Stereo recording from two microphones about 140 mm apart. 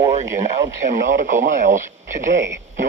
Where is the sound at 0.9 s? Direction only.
65° right (ahead or behind).